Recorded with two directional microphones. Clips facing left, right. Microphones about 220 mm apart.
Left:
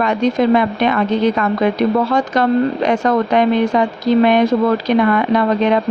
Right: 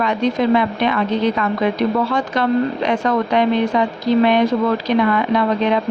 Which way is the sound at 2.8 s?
45° left (ahead or behind).